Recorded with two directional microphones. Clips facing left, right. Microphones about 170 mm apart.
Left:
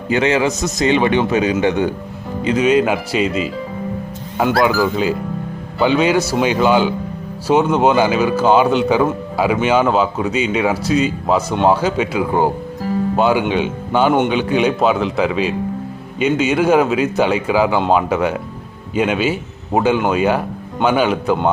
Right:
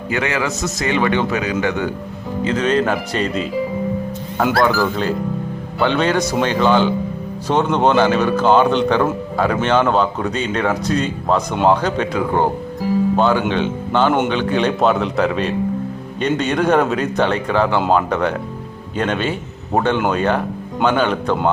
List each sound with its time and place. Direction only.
0.1 s a man's voice: 20° left (ahead or behind); by 3.5 s 5° left (ahead or behind)
4.5 s a man's voice: 10° left (ahead or behind)